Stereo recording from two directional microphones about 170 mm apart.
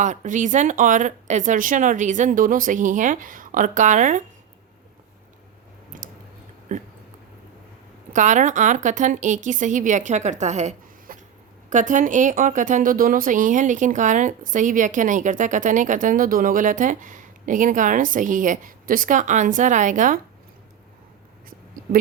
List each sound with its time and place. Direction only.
0.0 s speech: 45° right (ahead or behind)
5.9 s chewing: 50° right (ahead or behind)
6.7 s a sound: 45° right (ahead or behind)
8.1 s speech: 45° right (ahead or behind)